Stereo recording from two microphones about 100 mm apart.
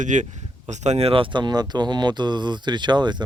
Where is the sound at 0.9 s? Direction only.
80° right.